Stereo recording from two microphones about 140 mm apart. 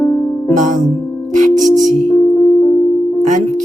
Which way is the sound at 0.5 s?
65° right (ahead or behind).